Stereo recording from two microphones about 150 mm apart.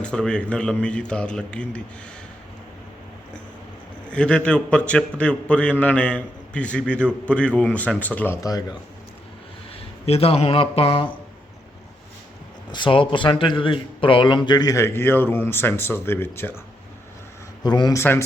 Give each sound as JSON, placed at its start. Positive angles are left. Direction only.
{"t": 0.0, "sound": "a man's voice", "side_deg": 5}
{"t": 4.1, "sound": "a man's voice", "side_deg": 5}
{"t": 10.1, "sound": "speech", "side_deg": 40}
{"t": 12.7, "sound": "speech", "side_deg": 35}
{"t": 17.6, "sound": "speech", "side_deg": 25}